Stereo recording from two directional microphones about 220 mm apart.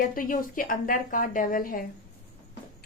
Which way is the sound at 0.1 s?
40° left (ahead or behind).